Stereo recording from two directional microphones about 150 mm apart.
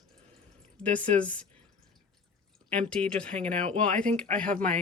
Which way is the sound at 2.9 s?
5° left (ahead or behind).